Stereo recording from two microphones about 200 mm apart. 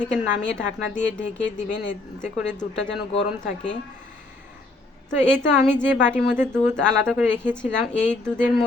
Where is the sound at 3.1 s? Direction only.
30° left (ahead or behind).